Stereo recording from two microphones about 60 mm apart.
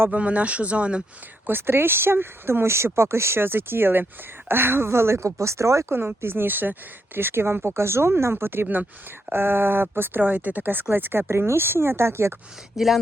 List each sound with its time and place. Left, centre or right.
0.1 s speech: right
1.5 s speech: right
5.9 s speech: right
12.7 s speech: centre